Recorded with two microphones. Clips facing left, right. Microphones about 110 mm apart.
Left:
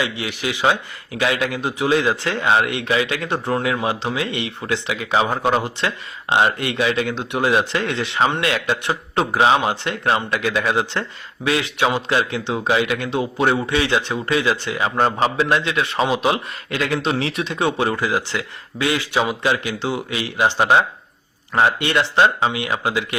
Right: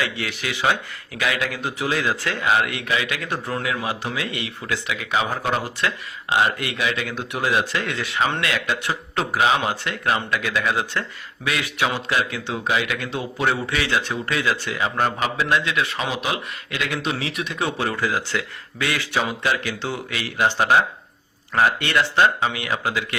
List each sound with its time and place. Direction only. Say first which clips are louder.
0.0 s a man's voice: left 3 dB; 15° left (ahead or behind)
17.7 s a man's voice: left 3 dB; 20° left (ahead or behind)